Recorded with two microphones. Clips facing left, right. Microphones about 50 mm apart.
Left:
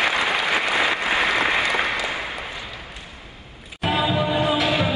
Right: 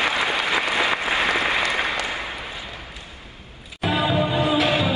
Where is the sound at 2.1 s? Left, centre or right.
Left.